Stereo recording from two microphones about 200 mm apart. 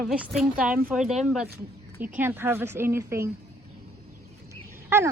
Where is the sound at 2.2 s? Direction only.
10° right (ahead or behind).